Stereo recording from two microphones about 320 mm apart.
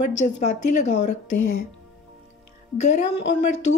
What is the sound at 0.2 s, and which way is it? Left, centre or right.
Speech, left.